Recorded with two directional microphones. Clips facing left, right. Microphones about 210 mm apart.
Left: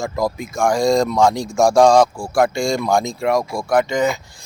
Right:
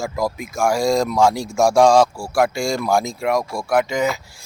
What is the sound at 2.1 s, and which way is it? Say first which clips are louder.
Speech: left 2 dB; 20° left (ahead or behind).